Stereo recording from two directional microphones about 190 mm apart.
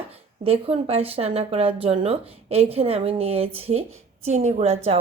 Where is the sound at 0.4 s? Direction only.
30° right (ahead or behind).